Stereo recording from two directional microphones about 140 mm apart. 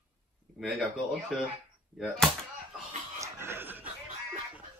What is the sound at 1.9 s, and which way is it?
Speech, centre (ahead or behind).